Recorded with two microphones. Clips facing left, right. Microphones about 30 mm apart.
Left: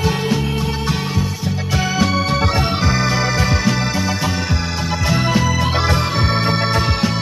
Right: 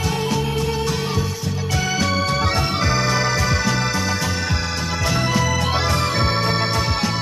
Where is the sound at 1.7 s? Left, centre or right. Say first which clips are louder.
Left 3 dB; centre.